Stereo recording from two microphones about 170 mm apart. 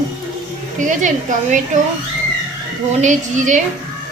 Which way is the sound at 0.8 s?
50° right (ahead or behind).